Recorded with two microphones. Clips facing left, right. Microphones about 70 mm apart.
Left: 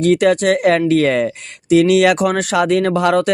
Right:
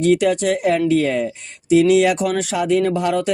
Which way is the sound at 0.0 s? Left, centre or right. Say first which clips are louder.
Left 3 dB; left.